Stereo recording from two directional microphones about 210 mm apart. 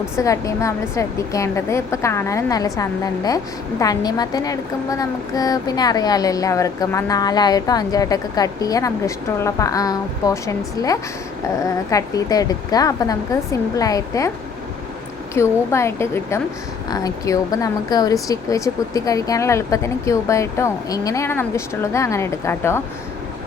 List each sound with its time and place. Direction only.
0.2 s a woman's voice: 15° left (ahead or behind)
11.6 s a woman's voice: 15° left (ahead or behind)
15.4 s a woman's voice: 15° left (ahead or behind)